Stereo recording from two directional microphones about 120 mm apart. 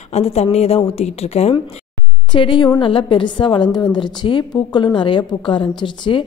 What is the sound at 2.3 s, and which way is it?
A woman's voice, 40° left (ahead or behind).